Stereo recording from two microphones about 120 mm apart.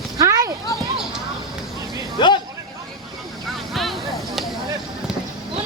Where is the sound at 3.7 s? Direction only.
Centre (ahead or behind).